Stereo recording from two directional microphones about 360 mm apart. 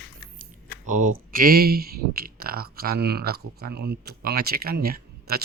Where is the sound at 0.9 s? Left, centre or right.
Right.